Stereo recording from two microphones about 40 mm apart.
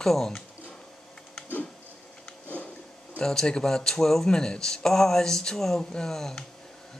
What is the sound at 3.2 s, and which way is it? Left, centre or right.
Speech, centre.